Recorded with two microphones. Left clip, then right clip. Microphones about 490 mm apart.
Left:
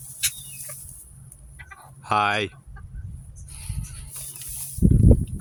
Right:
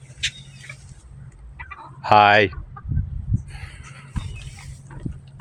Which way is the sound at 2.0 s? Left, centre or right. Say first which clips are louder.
Right 9 dB; left.